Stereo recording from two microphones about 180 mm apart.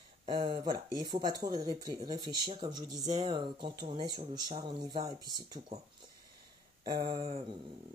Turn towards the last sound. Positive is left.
turn(degrees=-35)  # may be behind; listen again after turning